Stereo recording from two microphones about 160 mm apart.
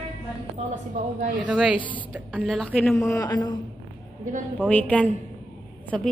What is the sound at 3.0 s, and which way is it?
Speech, 20° left (ahead or behind).